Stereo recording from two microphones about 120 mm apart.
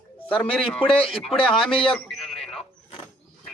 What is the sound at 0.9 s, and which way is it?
Speech, 50° left (ahead or behind).